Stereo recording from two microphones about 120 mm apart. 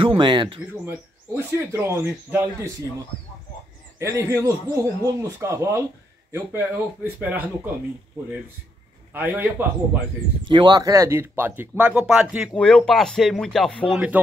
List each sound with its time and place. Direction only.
0.0 s speech: 45° right (ahead or behind)
0.8 s speech: 20° right (ahead or behind)
4.0 s speech: 25° right (ahead or behind)
9.1 s speech: 15° right (ahead or behind)
10.5 s speech: 35° right (ahead or behind); by 12.4 s 5° right (ahead or behind)
12.5 s speech: 10° left (ahead or behind)
13.9 s speech: 10° right (ahead or behind)